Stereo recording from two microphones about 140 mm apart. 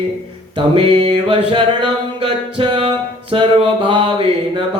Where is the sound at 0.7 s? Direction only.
35° right (ahead or behind).